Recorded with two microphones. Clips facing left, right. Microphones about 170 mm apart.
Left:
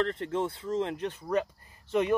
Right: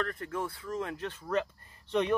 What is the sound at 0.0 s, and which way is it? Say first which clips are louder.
Speech: left 5 dB; 25° left (ahead or behind).